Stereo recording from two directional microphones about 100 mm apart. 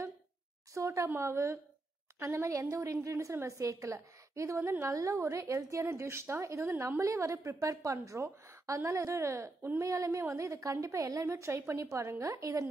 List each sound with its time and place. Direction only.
0.7 s a woman's voice: 30° right (ahead or behind)